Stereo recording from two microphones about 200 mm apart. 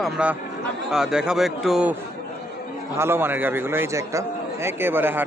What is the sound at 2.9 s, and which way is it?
A man's voice, 10° right (ahead or behind).